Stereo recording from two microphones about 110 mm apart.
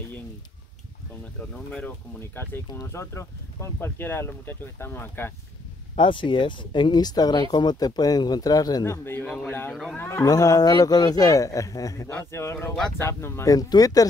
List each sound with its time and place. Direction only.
1.5 s speech: 10° left (ahead or behind)
5.9 s a man's voice: 45° left (ahead or behind)
8.8 s speech: 25° left (ahead or behind)
10.2 s a man's voice: 35° left (ahead or behind)